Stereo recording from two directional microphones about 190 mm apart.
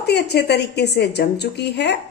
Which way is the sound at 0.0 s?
60° left (ahead or behind).